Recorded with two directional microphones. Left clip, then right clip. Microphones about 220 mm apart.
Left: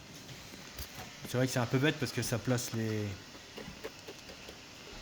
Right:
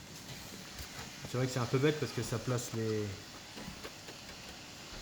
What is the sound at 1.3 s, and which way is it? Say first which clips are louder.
Speech: left 3 dB; 55° left (ahead or behind).